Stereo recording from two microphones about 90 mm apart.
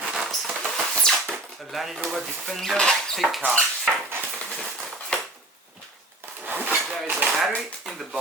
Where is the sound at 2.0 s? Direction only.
Centre (ahead or behind).